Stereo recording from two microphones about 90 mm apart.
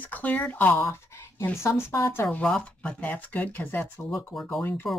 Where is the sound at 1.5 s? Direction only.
30° left (ahead or behind).